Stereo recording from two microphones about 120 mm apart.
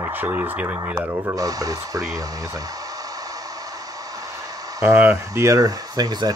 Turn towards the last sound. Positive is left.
turn(degrees=-35)  # may be behind; listen again after turning